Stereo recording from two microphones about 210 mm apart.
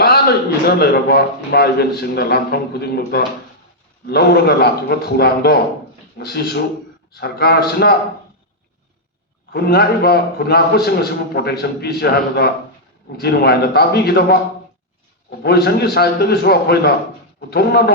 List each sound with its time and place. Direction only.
0.0 s a sound: 50° left (ahead or behind)
0.8 s a man's voice: 50° left (ahead or behind)
9.5 s a man's voice: 50° left (ahead or behind)
15.4 s a man's voice: 50° left (ahead or behind)